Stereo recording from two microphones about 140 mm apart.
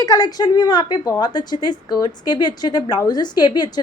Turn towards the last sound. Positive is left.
turn(degrees=30)  # may be behind; listen again after turning